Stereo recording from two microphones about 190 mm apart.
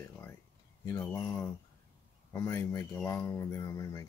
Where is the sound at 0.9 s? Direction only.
10° left (ahead or behind).